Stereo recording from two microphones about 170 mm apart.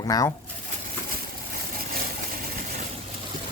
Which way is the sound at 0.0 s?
20° left (ahead or behind).